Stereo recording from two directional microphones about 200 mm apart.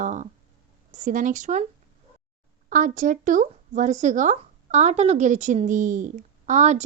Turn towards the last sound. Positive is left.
turn(degrees=-35)  # may be behind; listen again after turning